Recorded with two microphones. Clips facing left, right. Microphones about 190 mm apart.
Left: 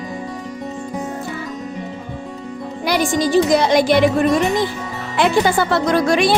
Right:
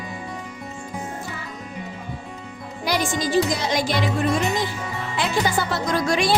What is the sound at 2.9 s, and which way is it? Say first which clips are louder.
Music: left 5 dB; 60° left (ahead or behind).